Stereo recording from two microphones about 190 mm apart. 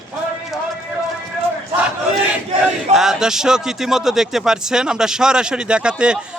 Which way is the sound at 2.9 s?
Centre (ahead or behind).